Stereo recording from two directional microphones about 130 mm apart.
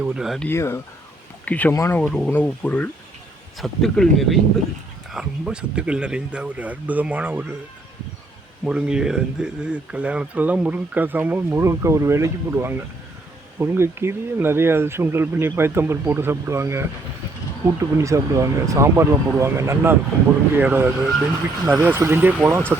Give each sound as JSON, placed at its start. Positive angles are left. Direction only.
{"t": 0.0, "sound": "speech", "side_deg": -5}
{"t": 0.3, "sound": "speech", "side_deg": 15}
{"t": 5.1, "sound": "speech", "side_deg": -10}
{"t": 8.6, "sound": "speech", "side_deg": -5}